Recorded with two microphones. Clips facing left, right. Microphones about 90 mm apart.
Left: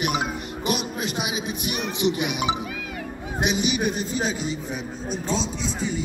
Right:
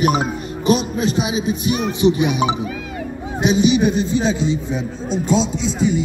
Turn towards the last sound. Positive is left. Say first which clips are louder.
# right 9 dB
turn(degrees=-20)  # may be behind; listen again after turning